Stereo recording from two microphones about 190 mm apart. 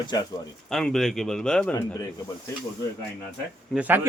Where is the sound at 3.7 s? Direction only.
10° right (ahead or behind).